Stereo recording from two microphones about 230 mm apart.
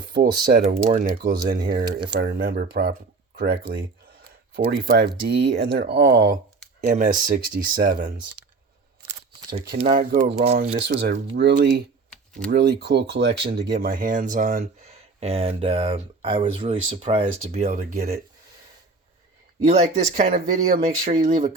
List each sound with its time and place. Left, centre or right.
0.2 s speech: right
1.6 s speech: centre
2.1 s speech: right
9.6 s speech: right
9.9 s speech: right
12.1 s typing: centre
12.5 s speech: right
19.5 s speech: right